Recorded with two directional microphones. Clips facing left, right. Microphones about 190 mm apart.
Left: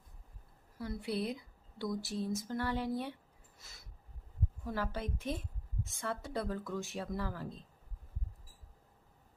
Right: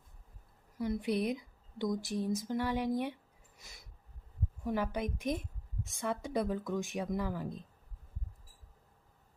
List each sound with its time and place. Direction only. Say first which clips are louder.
0.8 s speech: right 5 dB; 20° right (ahead or behind)
3.6 s a sound: right 3 dB; 15° right (ahead or behind)
4.6 s speech: right 5 dB; 15° right (ahead or behind)